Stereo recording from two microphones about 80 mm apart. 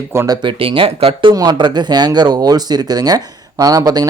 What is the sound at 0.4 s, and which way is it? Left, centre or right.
Speech, right.